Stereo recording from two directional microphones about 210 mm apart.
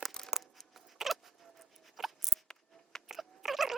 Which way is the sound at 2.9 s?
Centre (ahead or behind).